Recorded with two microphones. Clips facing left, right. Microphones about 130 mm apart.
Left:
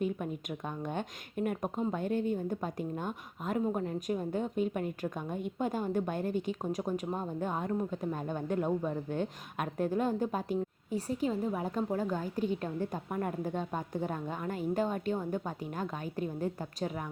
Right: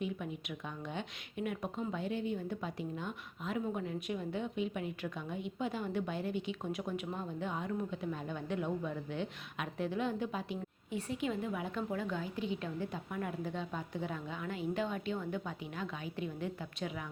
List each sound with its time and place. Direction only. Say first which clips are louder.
0.0 s speech: left 5 dB; 45° left (ahead or behind)